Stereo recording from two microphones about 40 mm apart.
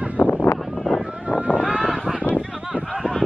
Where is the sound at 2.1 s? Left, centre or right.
Right.